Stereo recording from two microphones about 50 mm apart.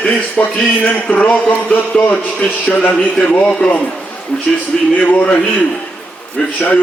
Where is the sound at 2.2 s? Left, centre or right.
Left.